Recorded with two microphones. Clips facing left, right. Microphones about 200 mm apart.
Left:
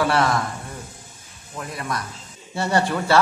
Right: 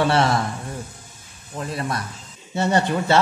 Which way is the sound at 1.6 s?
25° right (ahead or behind).